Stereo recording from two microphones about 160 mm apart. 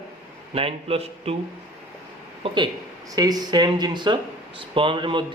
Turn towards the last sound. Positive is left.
turn(degrees=-30)  # may be behind; listen again after turning